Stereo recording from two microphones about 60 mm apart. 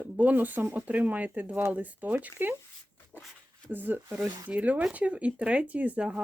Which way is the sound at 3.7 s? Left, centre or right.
Right.